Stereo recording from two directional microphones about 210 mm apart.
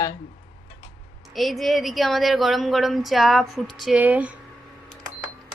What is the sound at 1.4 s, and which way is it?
Speech, centre (ahead or behind).